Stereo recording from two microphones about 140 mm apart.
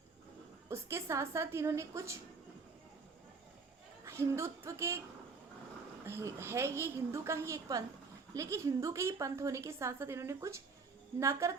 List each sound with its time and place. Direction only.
0.7 s a woman's voice: 20° right (ahead or behind)
4.0 s speech: 20° right (ahead or behind)
6.1 s a woman's voice: 20° right (ahead or behind)